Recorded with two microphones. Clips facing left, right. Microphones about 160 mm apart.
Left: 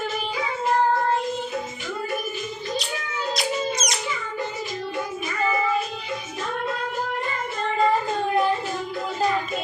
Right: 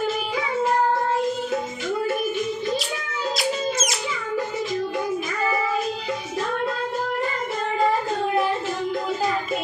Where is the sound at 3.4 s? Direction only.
5° right (ahead or behind).